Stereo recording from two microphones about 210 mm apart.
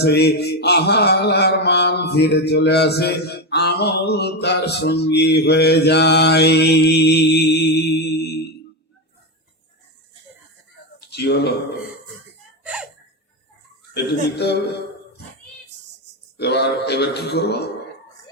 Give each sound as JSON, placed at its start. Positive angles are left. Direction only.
{"t": 0.0, "sound": "mantra", "side_deg": 50}
{"t": 11.1, "sound": "a sound", "side_deg": 50}
{"t": 12.6, "sound": "gasp", "side_deg": -5}
{"t": 13.9, "sound": "mantra", "side_deg": 50}
{"t": 16.4, "sound": "mantra", "side_deg": 50}